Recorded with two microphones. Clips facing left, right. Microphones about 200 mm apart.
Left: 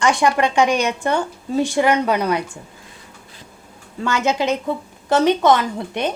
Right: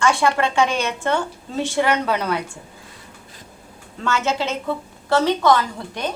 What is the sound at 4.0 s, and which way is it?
A woman's voice, 15° left (ahead or behind).